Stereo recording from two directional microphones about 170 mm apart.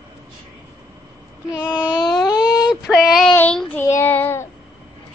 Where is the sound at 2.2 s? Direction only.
20° left (ahead or behind).